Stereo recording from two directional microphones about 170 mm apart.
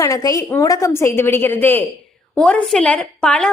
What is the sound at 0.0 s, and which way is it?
A woman's voice, 20° left (ahead or behind).